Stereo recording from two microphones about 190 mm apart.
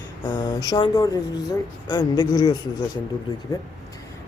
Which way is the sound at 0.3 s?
25° left (ahead or behind).